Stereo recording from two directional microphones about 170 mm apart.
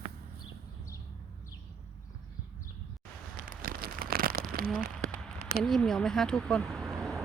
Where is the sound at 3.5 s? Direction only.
55° right (ahead or behind).